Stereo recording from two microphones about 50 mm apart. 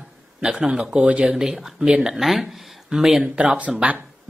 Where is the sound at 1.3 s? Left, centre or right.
Centre.